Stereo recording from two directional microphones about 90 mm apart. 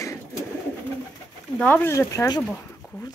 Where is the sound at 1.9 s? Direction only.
35° left (ahead or behind).